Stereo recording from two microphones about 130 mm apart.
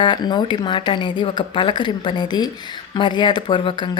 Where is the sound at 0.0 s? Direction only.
35° left (ahead or behind).